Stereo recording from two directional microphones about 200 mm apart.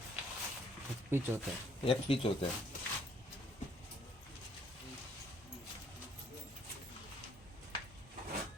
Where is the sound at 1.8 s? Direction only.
25° left (ahead or behind).